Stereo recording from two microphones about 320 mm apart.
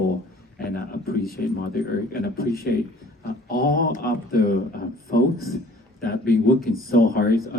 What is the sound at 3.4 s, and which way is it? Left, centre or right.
Speech, left.